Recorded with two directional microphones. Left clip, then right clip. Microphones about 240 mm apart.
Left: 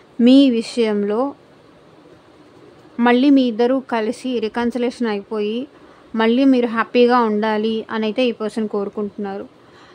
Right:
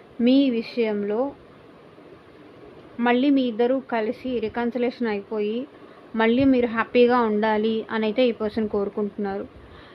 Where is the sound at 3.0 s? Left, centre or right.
Left.